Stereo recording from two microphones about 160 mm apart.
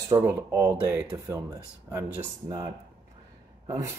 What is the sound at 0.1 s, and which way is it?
Speech, 15° right (ahead or behind).